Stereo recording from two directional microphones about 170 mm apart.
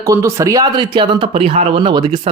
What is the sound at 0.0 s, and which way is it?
Speech, 20° right (ahead or behind).